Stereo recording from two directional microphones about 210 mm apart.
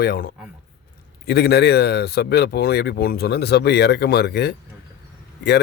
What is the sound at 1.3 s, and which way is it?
Speech, 50° left (ahead or behind).